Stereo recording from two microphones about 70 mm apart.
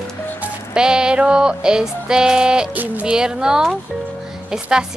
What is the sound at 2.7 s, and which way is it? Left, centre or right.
Speech, right.